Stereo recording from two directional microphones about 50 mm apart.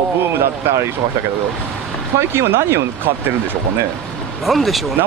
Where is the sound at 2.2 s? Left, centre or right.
Right.